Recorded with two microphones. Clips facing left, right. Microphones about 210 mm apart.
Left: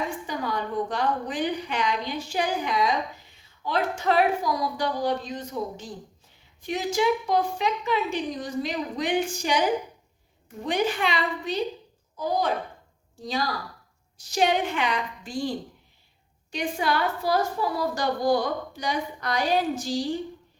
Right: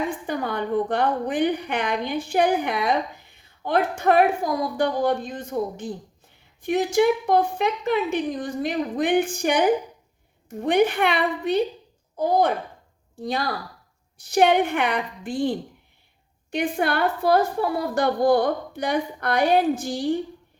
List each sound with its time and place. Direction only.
0.3 s a woman's voice: 55° right (ahead or behind)